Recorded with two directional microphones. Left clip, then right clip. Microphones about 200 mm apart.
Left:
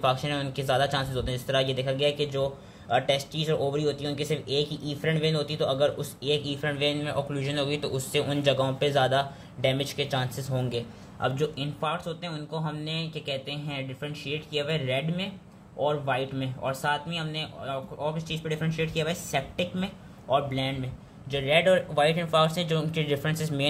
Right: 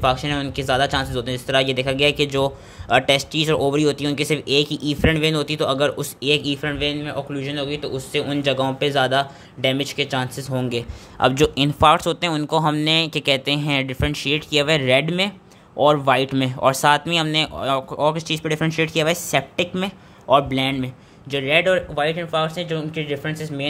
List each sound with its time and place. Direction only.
0.0 s speech: 25° right (ahead or behind)
11.1 s speech: 45° right (ahead or behind)
21.3 s speech: 25° right (ahead or behind); by 23.7 s centre (ahead or behind)